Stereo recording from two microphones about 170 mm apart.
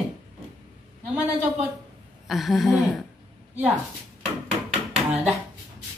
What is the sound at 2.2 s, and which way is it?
Speech, centre (ahead or behind).